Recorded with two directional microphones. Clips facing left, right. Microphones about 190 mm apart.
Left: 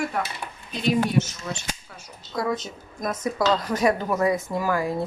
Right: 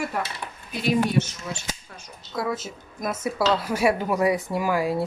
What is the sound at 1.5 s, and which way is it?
A woman's voice, 5° right (ahead or behind).